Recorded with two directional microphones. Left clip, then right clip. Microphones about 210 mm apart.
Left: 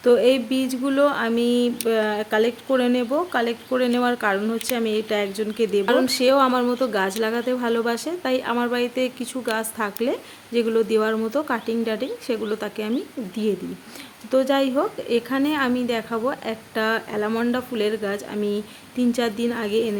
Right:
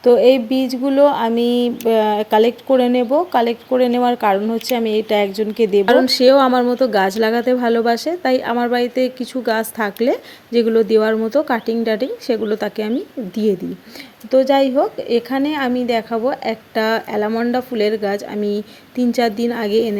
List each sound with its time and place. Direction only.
0.0 s speech: 15° right (ahead or behind)